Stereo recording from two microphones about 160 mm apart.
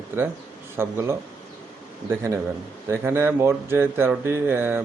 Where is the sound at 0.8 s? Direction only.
15° right (ahead or behind).